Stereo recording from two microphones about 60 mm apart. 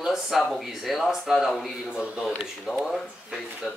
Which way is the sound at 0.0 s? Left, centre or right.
Centre.